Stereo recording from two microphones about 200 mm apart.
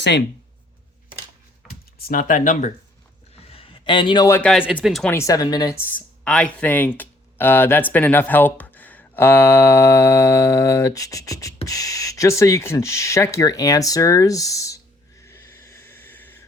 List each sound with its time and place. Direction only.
1.6 s computer keyboard: centre (ahead or behind)
2.0 s speech: 45° left (ahead or behind)
3.3 s a sound: 30° left (ahead or behind); by 4.5 s 10° left (ahead or behind)
4.5 s speech: 5° right (ahead or behind)
5.1 s speech: 15° left (ahead or behind)
15.2 s a sound: 15° left (ahead or behind)